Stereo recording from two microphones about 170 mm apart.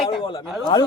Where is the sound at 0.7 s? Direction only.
25° left (ahead or behind).